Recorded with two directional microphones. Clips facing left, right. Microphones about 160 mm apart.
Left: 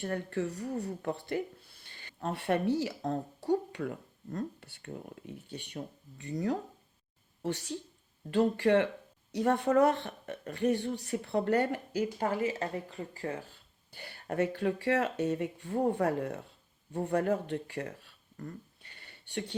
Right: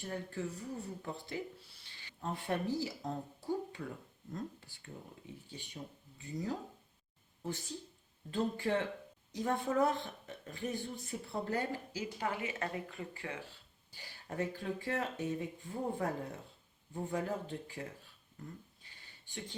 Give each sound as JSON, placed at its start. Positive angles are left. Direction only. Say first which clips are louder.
{"t": 0.0, "sound": "speech", "louder": "left 7 dB", "side_deg": 70}
{"t": 2.2, "sound": "speech", "louder": "left 7 dB", "side_deg": 75}
{"t": 12.2, "sound": "speech", "louder": "left 3 dB", "side_deg": 40}
{"t": 13.9, "sound": "speech", "louder": "left 7 dB", "side_deg": 60}
{"t": 18.3, "sound": "a sound", "louder": "left 6 dB", "side_deg": 70}